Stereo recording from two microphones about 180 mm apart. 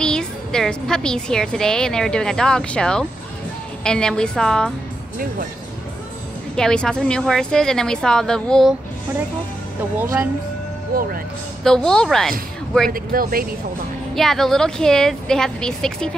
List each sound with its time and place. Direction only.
0.0 s a woman's voice: 5° left (ahead or behind)
6.5 s a woman's voice: 5° left (ahead or behind)
11.6 s a woman's voice: 5° left (ahead or behind)
12.9 s speech: 55° right (ahead or behind)
14.1 s a woman's voice: centre (ahead or behind)